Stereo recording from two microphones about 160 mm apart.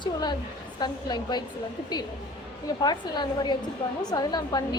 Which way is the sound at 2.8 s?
25° left (ahead or behind).